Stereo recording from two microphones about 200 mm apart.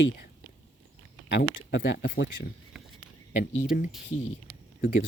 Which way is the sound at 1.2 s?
55° left (ahead or behind).